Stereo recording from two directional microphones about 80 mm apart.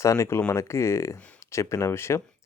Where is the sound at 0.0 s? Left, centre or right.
Left.